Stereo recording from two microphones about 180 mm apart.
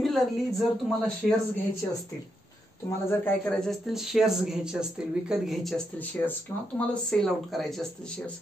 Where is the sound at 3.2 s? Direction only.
5° left (ahead or behind).